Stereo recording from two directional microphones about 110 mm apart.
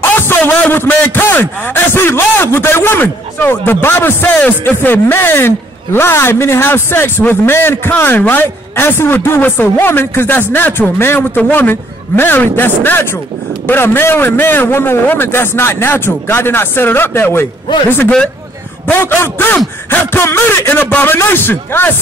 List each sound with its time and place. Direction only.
0.0 s a man's voice: 20° left (ahead or behind)